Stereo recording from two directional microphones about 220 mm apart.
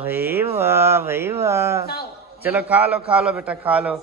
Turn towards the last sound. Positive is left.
turn(degrees=-5)  # may be behind; listen again after turning